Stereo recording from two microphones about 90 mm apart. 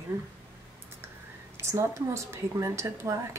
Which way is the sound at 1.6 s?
35° right (ahead or behind).